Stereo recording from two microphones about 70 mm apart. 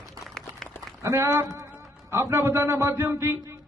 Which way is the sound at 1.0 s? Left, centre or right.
Right.